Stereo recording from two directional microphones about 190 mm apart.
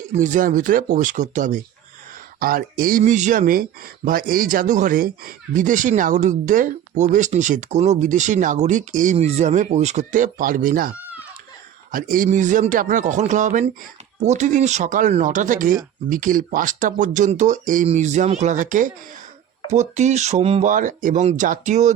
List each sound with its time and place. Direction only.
0.1 s speech: 40° right (ahead or behind)